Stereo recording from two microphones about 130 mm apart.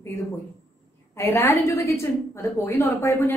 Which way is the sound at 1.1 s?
20° left (ahead or behind).